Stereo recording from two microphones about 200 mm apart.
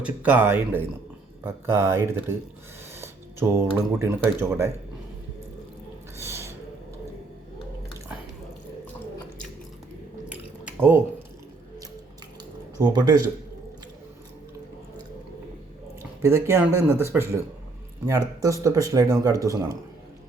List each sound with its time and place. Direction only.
0.0 s speech: 5° right (ahead or behind)
6.1 s a sound: 15° right (ahead or behind)
10.2 s drip: 10° right (ahead or behind)
12.8 s speech: 20° right (ahead or behind)
16.2 s speech: 15° right (ahead or behind)